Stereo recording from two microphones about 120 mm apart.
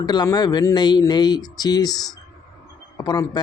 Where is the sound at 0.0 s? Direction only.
35° left (ahead or behind).